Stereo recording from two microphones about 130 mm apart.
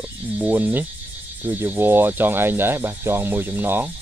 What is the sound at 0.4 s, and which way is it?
Speech, 10° right (ahead or behind).